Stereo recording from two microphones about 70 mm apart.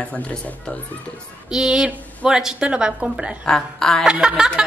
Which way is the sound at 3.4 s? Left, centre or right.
Centre.